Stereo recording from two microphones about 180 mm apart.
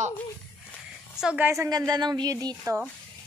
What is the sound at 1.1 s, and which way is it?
A woman's voice, 5° right (ahead or behind).